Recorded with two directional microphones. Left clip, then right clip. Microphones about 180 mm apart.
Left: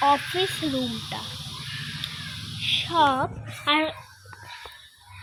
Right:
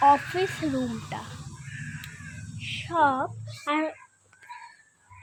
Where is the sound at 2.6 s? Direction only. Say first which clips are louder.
Left 3 dB; 5° left (ahead or behind).